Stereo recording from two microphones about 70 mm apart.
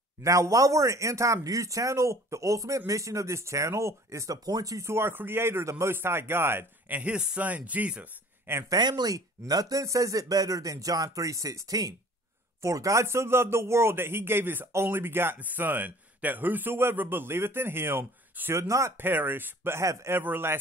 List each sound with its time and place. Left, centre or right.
0.2 s speech: right
7.0 s speech: centre
8.7 s a man's voice: right
18.6 s speech: right
18.9 s a man's voice: right
19.8 s a man's voice: right